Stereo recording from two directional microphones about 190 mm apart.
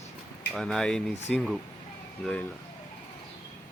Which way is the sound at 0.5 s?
5° left (ahead or behind).